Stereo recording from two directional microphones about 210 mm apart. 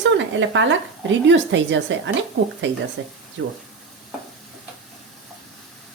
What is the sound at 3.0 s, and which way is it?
Speech, 60° right (ahead or behind).